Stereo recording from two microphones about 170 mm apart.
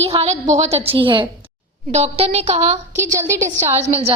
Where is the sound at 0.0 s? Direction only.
35° right (ahead or behind).